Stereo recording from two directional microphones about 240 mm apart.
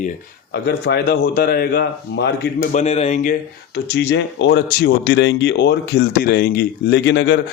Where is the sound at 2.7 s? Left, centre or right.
Left.